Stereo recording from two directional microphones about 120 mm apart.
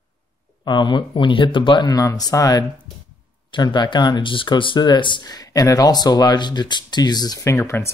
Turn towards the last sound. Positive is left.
turn(degrees=20)  # may be behind; listen again after turning